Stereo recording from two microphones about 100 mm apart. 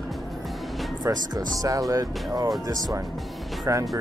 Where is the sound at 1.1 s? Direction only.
35° right (ahead or behind).